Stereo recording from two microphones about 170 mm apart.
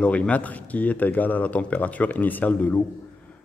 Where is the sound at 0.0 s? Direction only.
10° left (ahead or behind).